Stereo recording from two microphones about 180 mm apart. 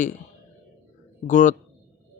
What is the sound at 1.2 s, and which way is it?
Speech, 45° left (ahead or behind).